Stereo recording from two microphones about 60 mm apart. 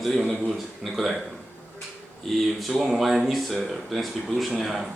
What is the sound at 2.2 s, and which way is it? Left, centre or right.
Speech, centre.